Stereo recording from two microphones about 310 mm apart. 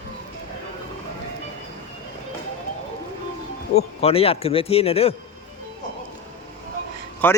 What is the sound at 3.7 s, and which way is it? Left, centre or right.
A man's voice, centre.